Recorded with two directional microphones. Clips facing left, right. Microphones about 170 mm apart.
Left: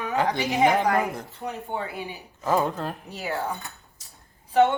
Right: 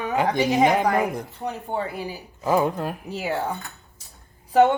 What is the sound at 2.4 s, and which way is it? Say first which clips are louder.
Speech: right 3 dB; 15° right (ahead or behind).